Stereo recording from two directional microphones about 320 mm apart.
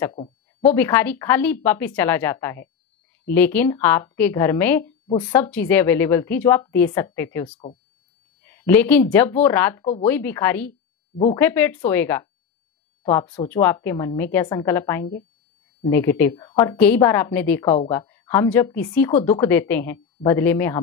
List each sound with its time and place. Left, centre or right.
0.0 s a woman's voice: centre